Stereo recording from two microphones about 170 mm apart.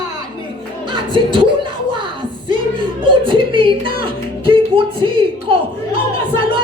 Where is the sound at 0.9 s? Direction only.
30° right (ahead or behind).